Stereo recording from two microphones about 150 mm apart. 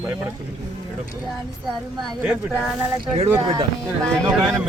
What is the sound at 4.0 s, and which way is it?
Speech, 5° left (ahead or behind).